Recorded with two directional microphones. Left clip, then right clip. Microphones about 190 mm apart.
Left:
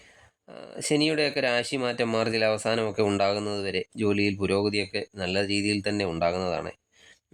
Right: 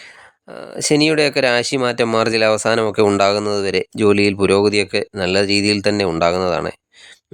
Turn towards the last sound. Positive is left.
turn(degrees=-35)  # may be behind; listen again after turning